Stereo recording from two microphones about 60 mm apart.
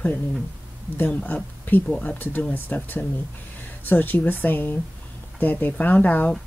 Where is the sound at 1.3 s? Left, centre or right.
Left.